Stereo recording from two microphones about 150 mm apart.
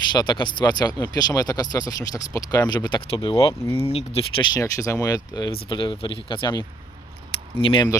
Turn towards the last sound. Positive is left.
turn(degrees=35)  # may be behind; listen again after turning